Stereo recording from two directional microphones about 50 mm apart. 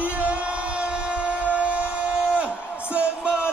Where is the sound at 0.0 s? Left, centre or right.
Right.